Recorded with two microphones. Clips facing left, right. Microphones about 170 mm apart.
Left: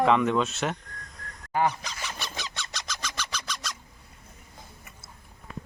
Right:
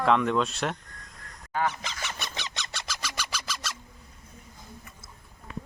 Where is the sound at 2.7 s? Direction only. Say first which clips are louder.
Even; 5° right (ahead or behind).